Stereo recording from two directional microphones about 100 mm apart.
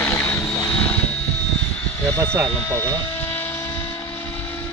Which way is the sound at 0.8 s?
10° left (ahead or behind).